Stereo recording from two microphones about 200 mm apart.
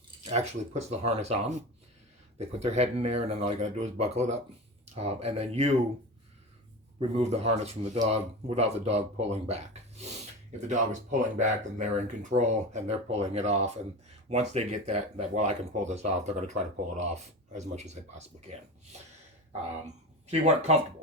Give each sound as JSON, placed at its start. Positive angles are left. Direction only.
{"t": 0.3, "sound": "speech", "side_deg": -35}
{"t": 7.1, "sound": "speech", "side_deg": -30}
{"t": 10.7, "sound": "speech", "side_deg": -35}
{"t": 19.8, "sound": "speech", "side_deg": -35}